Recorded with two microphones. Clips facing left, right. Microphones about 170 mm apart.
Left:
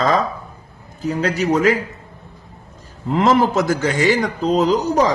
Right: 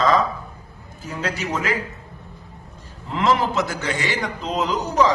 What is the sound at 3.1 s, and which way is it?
A man's voice, 45° left (ahead or behind).